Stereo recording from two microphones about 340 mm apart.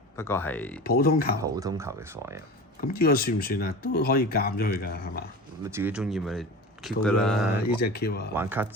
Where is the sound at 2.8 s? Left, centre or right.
Left.